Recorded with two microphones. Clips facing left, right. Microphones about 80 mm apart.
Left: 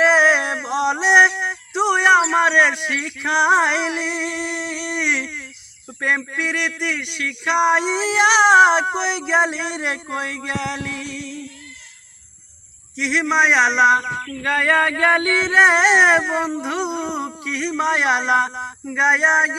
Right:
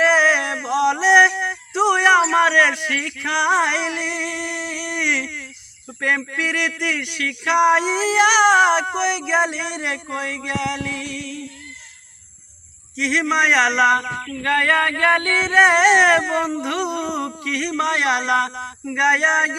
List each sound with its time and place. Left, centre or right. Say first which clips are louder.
0.0 s a sound: left 1 dB; left
1.4 s speech: right 1 dB; centre
8.5 s speech: left 3 dB; centre
13.0 s speech: left 1 dB; centre